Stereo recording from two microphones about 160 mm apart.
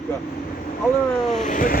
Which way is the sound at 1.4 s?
55° left (ahead or behind).